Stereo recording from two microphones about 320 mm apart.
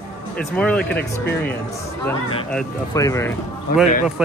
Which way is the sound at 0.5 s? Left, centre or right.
Centre.